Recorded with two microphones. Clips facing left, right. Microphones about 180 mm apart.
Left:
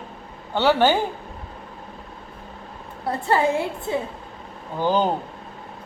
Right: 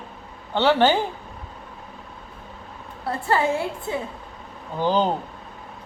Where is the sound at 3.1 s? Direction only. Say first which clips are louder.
Left 2 dB; 20° left (ahead or behind).